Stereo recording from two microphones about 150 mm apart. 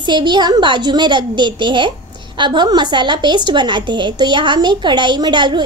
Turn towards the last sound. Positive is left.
turn(degrees=-30)  # may be behind; listen again after turning